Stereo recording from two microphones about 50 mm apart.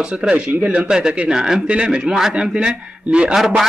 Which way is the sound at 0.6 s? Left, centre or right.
Right.